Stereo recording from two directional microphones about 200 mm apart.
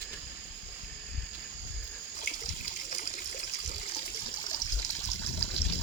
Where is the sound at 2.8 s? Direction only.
35° left (ahead or behind).